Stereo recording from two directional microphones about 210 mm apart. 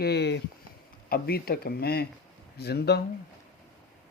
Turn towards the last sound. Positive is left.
turn(degrees=50)  # may be behind; listen again after turning